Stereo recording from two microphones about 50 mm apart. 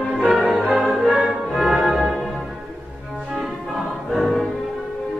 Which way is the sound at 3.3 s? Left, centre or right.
Centre.